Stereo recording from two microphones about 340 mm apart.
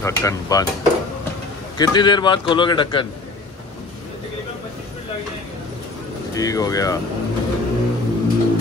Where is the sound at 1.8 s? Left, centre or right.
Centre.